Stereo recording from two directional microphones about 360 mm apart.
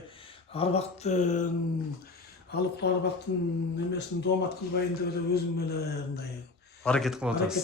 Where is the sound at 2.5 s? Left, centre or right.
Left.